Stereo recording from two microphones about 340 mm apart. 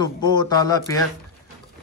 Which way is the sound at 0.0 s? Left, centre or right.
Centre.